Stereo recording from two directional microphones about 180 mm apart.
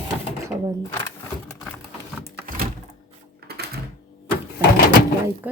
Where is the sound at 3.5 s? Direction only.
60° right (ahead or behind).